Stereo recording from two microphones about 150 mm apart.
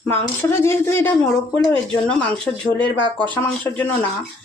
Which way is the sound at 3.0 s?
30° right (ahead or behind).